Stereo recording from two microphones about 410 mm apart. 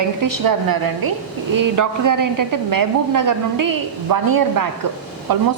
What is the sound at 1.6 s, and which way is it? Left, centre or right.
Speech, right.